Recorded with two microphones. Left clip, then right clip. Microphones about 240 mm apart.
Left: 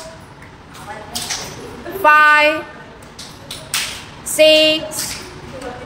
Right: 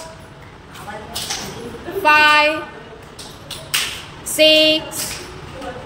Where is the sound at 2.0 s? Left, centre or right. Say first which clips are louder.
Left 2 dB; centre.